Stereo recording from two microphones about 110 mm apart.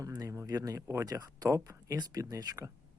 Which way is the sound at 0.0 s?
30° right (ahead or behind).